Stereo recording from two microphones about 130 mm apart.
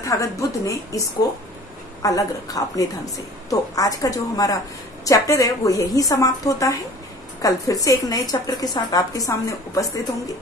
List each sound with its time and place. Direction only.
0.0 s a woman's voice: 25° left (ahead or behind)